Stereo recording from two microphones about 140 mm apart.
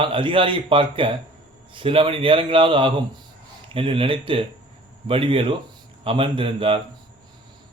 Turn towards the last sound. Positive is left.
turn(degrees=-40)  # may be behind; listen again after turning